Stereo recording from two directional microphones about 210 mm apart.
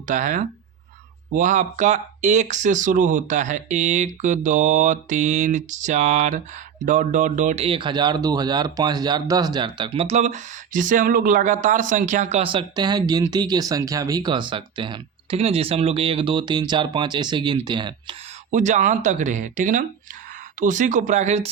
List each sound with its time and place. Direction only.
0.1 s speech: 40° right (ahead or behind); by 18.2 s 20° right (ahead or behind)
18.5 s speech: 35° right (ahead or behind)